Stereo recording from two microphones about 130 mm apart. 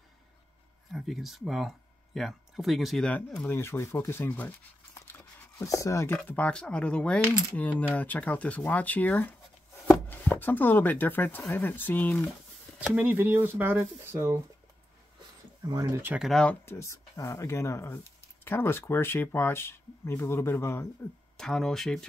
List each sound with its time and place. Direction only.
0.9 s speech: centre (ahead or behind)
3.4 s speech: 20° left (ahead or behind)
6.1 s speech: 10° left (ahead or behind)
12.8 s speech: 10° right (ahead or behind)
15.6 s speech: 25° right (ahead or behind)
16.2 s speech: 5° left (ahead or behind)
16.6 s speech: 20° left (ahead or behind)
21.4 s speech: 5° left (ahead or behind)